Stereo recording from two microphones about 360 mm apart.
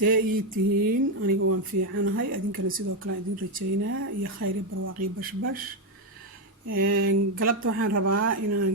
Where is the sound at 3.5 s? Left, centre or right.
Right.